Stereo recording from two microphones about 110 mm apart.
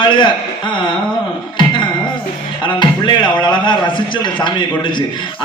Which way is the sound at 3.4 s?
45° left (ahead or behind).